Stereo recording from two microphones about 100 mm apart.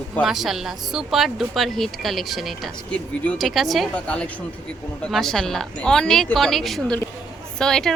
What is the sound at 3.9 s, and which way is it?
A man's voice, 15° left (ahead or behind).